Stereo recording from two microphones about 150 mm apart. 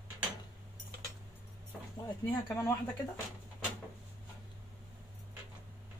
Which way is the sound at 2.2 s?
25° left (ahead or behind).